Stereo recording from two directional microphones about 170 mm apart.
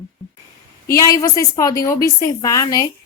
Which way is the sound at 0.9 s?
20° left (ahead or behind).